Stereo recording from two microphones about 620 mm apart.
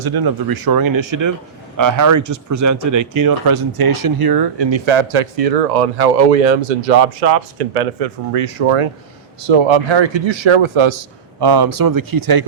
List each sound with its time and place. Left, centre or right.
0.0 s speech: right
11.3 s speech: right